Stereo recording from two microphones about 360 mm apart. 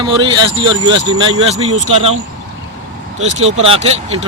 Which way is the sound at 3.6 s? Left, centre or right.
Centre.